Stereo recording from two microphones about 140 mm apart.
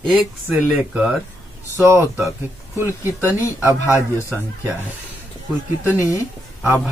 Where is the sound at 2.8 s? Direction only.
20° left (ahead or behind).